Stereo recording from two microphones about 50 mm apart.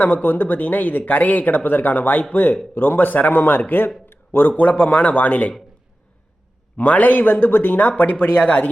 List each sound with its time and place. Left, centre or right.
0.0 s speech: left
4.1 s a sound: left
4.6 s speech: left
6.7 s speech: left